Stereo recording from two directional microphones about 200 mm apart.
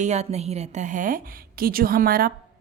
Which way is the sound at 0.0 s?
35° right (ahead or behind).